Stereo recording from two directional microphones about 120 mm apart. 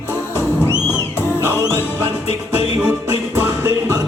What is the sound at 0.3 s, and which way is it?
Music, 20° left (ahead or behind).